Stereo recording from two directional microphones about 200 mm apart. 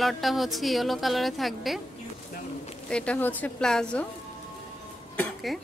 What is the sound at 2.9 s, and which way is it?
A woman's voice, 5° left (ahead or behind).